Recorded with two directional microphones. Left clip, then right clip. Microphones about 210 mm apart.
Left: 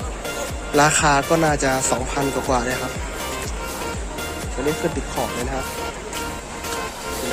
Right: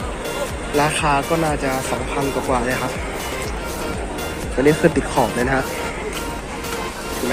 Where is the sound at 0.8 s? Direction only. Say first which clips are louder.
Left 2 dB; 35° left (ahead or behind).